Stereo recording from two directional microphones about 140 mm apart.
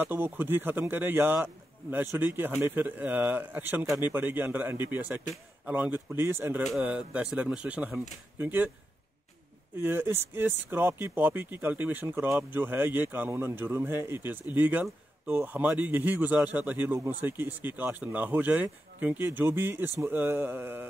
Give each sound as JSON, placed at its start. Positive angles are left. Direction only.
{"t": 0.0, "sound": "a man's voice", "side_deg": -15}
{"t": 9.8, "sound": "a man's voice", "side_deg": -15}